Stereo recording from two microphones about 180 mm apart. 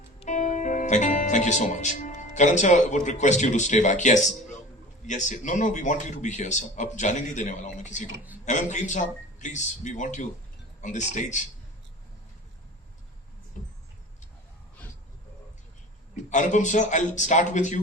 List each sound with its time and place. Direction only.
0.2 s a man's voice: 45° left (ahead or behind)
16.3 s speech: 40° left (ahead or behind)